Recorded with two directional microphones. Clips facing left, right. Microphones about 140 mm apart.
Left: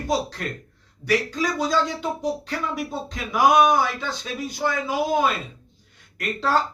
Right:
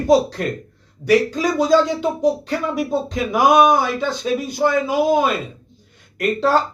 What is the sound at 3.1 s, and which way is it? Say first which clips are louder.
Speech: right 2 dB; 20° right (ahead or behind).